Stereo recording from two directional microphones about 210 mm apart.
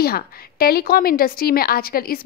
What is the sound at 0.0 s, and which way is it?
Speech, 45° left (ahead or behind).